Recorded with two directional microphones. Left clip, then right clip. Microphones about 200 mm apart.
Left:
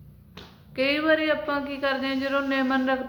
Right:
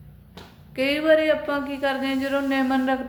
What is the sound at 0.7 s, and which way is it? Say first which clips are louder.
A woman's voice: right 3 dB; 5° right (ahead or behind).